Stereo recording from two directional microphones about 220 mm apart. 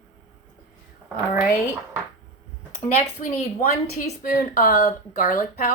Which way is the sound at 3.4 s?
35° left (ahead or behind).